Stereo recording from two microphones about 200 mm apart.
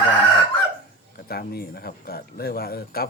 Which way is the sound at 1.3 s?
50° left (ahead or behind).